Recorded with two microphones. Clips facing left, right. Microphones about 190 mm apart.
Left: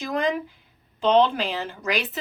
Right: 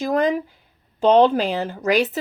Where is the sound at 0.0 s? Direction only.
45° right (ahead or behind).